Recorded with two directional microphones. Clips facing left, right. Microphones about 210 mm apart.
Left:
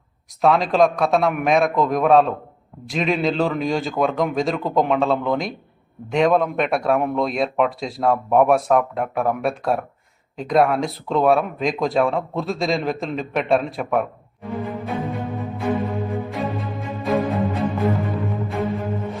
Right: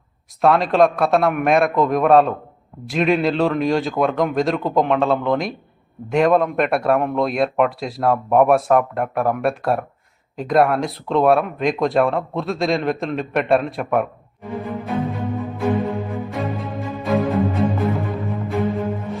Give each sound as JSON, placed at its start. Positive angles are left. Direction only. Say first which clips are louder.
{"t": 0.4, "sound": "speech", "louder": "right 1 dB", "side_deg": 0}
{"t": 14.6, "sound": "music", "louder": "right 3 dB", "side_deg": 0}